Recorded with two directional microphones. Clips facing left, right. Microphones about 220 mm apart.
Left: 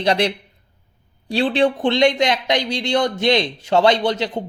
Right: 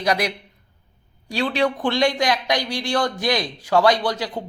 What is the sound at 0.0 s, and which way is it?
Speech, 30° left (ahead or behind).